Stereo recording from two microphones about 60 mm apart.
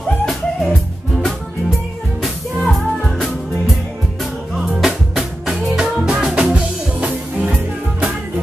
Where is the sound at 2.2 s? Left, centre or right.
Centre.